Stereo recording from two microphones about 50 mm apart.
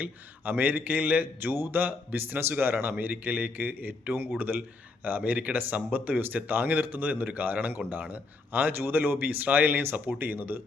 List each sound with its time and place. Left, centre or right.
0.0 s speech: right
2.4 s speech: right